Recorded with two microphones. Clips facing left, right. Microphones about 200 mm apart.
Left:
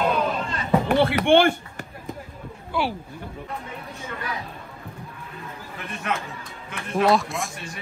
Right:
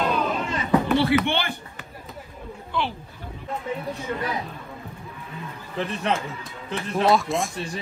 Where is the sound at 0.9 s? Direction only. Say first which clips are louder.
Left 4 dB; 50° left (ahead or behind).